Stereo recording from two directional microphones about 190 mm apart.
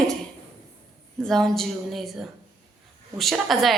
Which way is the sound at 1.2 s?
Centre (ahead or behind).